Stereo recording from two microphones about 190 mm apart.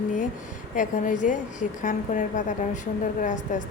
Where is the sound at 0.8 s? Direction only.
40° left (ahead or behind).